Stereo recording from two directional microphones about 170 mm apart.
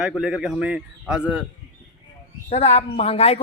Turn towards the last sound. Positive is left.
turn(degrees=40)  # may be behind; listen again after turning